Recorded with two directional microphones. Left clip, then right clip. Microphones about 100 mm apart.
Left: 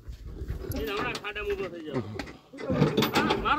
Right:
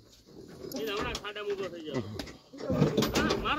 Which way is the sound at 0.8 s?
30° left (ahead or behind).